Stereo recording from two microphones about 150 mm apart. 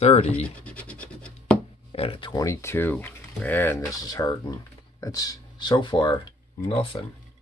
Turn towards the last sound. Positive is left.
turn(degrees=35)  # may be behind; listen again after turning